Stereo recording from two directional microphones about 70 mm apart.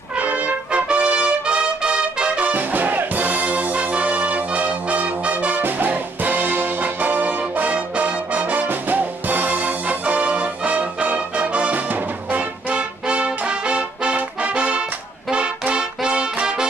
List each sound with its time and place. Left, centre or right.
0.2 s trumpet: right
8.6 s music: right